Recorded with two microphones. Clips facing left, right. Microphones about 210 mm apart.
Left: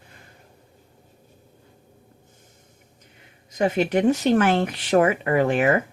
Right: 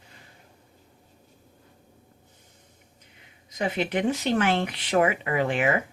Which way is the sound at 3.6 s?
45° left (ahead or behind).